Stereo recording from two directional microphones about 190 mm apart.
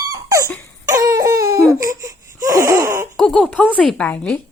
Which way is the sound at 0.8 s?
15° right (ahead or behind).